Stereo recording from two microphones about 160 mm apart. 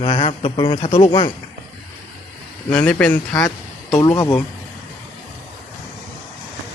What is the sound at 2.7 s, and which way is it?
Speech, 5° left (ahead or behind).